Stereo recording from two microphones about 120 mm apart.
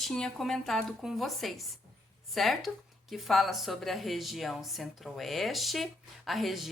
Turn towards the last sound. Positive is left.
turn(degrees=0)  # may be behind; listen again after turning